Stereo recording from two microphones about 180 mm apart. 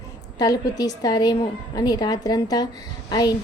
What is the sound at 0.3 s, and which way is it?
A woman's voice, 20° left (ahead or behind).